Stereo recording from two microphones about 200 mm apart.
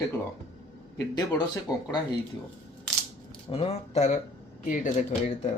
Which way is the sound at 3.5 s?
30° left (ahead or behind).